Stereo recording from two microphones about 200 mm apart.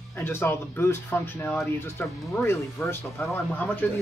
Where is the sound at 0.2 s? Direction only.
10° left (ahead or behind).